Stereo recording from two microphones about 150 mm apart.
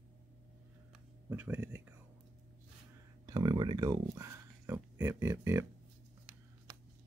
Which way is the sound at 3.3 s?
25° right (ahead or behind).